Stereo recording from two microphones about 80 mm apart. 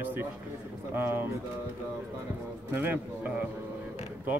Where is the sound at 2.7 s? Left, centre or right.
Right.